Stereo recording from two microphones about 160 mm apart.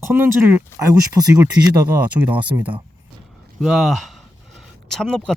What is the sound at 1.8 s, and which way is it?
Speech, 10° right (ahead or behind).